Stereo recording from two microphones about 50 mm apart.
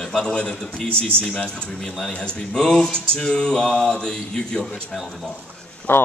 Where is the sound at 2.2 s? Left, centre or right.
Centre.